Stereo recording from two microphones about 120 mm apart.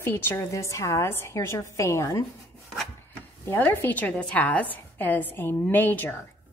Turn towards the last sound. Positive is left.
turn(degrees=15)  # may be behind; listen again after turning